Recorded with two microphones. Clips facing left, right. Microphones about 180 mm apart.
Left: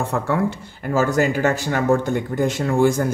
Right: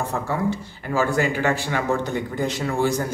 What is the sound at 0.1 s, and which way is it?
Speech, 65° left (ahead or behind).